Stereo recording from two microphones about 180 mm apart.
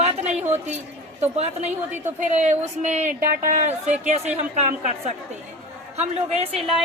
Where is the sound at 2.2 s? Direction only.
45° right (ahead or behind).